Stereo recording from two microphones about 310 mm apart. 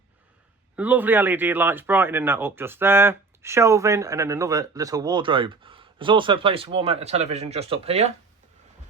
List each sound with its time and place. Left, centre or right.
0.8 s speech: centre